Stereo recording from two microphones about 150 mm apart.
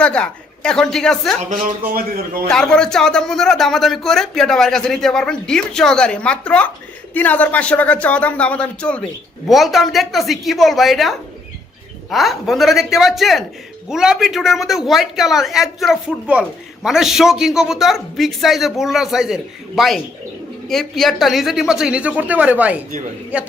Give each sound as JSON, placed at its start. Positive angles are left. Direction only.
{"t": 0.0, "sound": "a woman's voice", "side_deg": 5}
{"t": 1.9, "sound": "a man's voice", "side_deg": -75}
{"t": 2.5, "sound": "a woman's voice", "side_deg": 5}
{"t": 12.1, "sound": "a woman's voice", "side_deg": 0}